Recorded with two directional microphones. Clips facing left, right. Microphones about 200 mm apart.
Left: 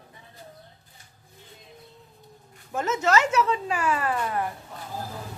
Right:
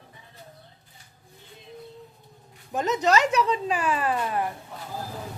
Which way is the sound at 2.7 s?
15° right (ahead or behind).